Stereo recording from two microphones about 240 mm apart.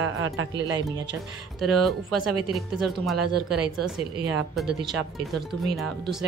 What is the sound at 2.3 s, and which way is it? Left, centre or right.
Speech, right.